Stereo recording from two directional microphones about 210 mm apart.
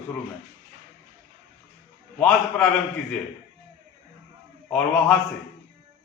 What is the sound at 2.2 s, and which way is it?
Speech, 5° left (ahead or behind).